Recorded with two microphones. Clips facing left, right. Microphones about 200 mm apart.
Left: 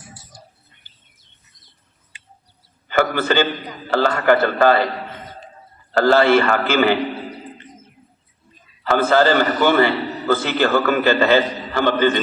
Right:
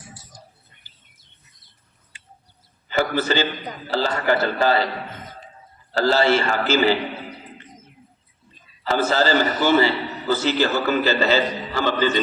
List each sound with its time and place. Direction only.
2.9 s a man's voice: 55° left (ahead or behind)
5.9 s a man's voice: 55° left (ahead or behind)
8.9 s a man's voice: 55° left (ahead or behind)